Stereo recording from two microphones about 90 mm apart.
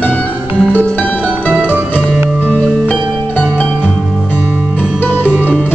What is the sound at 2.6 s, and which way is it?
Music, 10° left (ahead or behind).